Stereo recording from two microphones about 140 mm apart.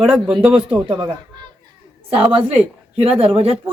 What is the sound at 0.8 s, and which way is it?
Speech, 35° right (ahead or behind).